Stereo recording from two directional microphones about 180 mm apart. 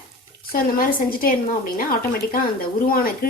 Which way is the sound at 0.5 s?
55° left (ahead or behind).